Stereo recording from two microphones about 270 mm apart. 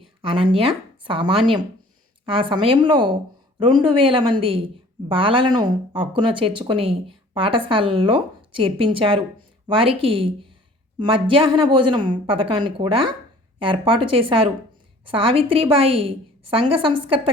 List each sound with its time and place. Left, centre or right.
0.0 s a woman's voice: centre